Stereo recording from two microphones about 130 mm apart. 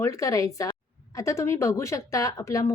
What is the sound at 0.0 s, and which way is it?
A woman's voice, 25° left (ahead or behind).